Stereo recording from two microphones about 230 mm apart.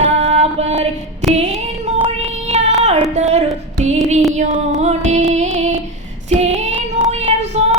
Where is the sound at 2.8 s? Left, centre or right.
Right.